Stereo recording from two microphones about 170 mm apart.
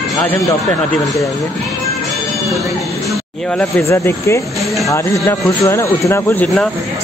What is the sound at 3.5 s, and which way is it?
Speech, 15° left (ahead or behind).